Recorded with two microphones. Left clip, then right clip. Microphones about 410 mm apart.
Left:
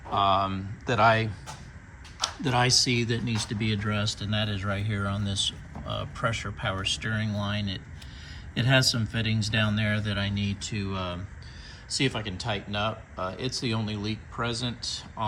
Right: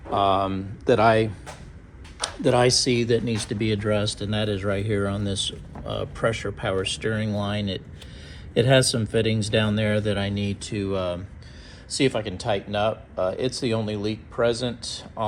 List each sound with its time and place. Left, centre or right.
0.1 s speech: centre